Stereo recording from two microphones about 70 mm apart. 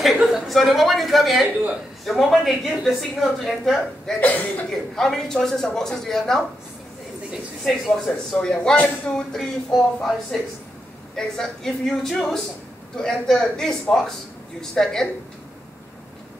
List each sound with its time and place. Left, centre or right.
0.0 s speech: centre
4.2 s speech: left
4.6 s speech: centre
7.6 s speech: centre